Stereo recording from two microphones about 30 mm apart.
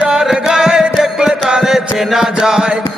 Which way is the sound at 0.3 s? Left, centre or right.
Centre.